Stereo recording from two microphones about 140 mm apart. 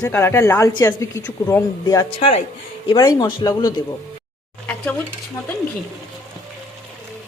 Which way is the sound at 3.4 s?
30° left (ahead or behind).